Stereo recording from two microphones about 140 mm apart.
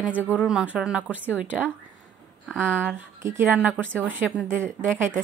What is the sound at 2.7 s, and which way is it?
Speech, 10° left (ahead or behind).